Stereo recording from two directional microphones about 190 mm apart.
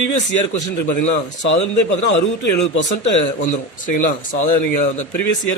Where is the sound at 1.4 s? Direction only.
75° left (ahead or behind).